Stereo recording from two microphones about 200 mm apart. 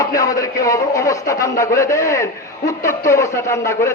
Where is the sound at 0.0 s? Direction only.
15° left (ahead or behind).